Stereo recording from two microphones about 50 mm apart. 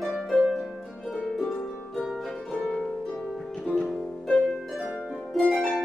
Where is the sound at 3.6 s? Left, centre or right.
Centre.